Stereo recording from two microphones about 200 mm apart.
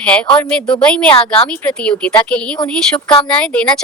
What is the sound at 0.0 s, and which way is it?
A woman's voice, 5° left (ahead or behind).